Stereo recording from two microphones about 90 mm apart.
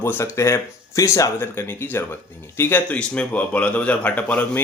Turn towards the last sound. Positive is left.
turn(degrees=15)  # may be behind; listen again after turning